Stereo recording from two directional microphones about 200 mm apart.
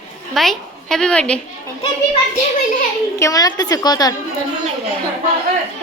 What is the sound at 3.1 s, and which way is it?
A woman's voice, 15° left (ahead or behind).